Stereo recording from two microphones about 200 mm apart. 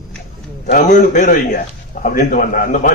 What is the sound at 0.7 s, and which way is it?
A man's voice, 40° left (ahead or behind).